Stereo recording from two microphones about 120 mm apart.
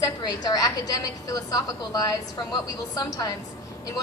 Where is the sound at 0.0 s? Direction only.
35° left (ahead or behind).